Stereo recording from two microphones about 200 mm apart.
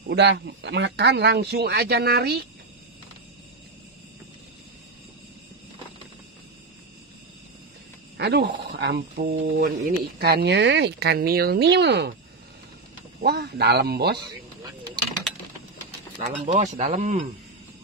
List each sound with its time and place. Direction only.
0.0 s speech: 60° right (ahead or behind)
8.2 s speech: 55° right (ahead or behind)
13.2 s speech: 55° right (ahead or behind)
16.2 s speech: 35° right (ahead or behind)